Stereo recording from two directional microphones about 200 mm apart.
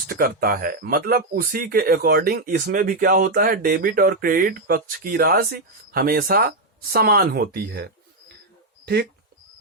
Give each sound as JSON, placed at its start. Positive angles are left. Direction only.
{"t": 0.1, "sound": "speech", "side_deg": -50}